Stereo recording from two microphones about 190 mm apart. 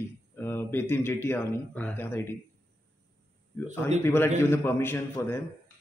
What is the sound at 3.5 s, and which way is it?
Speech, 15° left (ahead or behind).